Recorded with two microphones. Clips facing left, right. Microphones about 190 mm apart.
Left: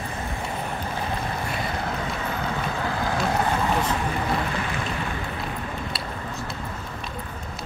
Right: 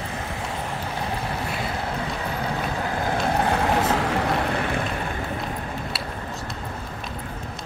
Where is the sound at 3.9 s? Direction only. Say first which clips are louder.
Right 3 dB; 75° right (ahead or behind); by 4.8 s 60° right (ahead or behind).